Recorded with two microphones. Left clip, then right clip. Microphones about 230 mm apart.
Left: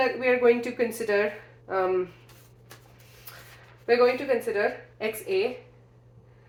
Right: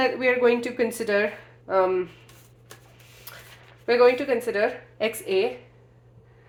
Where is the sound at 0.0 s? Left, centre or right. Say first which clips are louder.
Right 1 dB; right.